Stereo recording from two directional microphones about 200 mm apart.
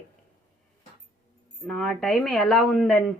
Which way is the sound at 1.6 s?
5° left (ahead or behind).